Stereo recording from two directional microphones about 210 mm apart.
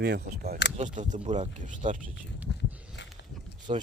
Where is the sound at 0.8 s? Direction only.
35° right (ahead or behind).